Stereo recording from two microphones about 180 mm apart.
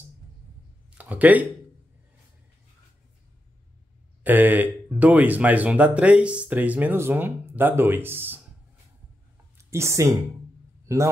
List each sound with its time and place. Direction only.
0.9 s speech: 10° right (ahead or behind)
4.2 s speech: 10° right (ahead or behind)
9.7 s speech: 15° right (ahead or behind)